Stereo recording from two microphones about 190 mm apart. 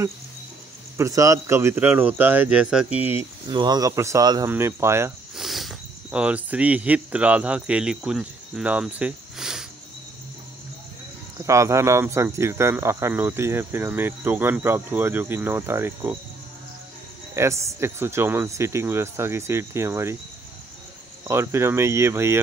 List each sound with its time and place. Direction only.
0.9 s speech: 15° right (ahead or behind)
3.4 s speech: 20° right (ahead or behind)
5.3 s speech: centre (ahead or behind)
11.3 s speech: 15° right (ahead or behind)
17.3 s speech: 15° right (ahead or behind)
21.3 s speech: 15° right (ahead or behind)